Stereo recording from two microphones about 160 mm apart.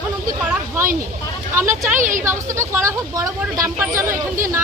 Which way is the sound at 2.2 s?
15° right (ahead or behind).